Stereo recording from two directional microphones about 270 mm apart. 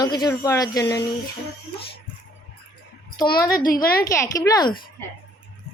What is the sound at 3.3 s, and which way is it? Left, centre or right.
Speech, left.